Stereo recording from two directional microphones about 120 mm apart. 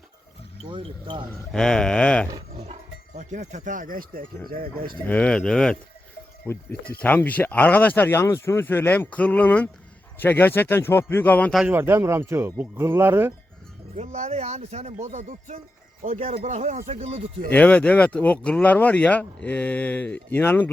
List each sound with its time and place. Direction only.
0.6 s speech: 45° right (ahead or behind)
1.5 s speech: 5° left (ahead or behind)
3.2 s speech: 80° right
5.0 s speech: 10° left (ahead or behind)
6.5 s speech: 15° left (ahead or behind)
11.7 s speech: 20° right (ahead or behind)
13.9 s speech: 65° right (ahead or behind)
17.5 s speech: 10° left (ahead or behind)